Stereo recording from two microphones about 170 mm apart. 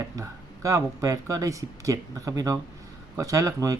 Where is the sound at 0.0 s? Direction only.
20° right (ahead or behind).